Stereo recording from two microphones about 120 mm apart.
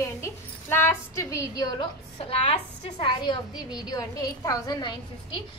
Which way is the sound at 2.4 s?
55° left (ahead or behind).